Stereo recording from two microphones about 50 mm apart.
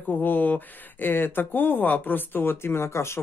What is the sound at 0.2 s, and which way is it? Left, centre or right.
Speech, left.